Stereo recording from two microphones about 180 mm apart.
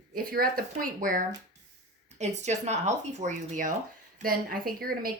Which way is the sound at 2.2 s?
40° right (ahead or behind).